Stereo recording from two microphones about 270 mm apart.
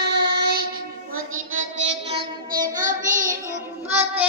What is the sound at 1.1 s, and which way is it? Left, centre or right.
Child singing, right.